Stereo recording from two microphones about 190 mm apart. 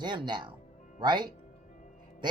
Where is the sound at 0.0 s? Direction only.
25° right (ahead or behind).